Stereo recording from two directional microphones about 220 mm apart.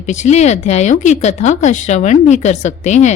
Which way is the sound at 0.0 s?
30° left (ahead or behind).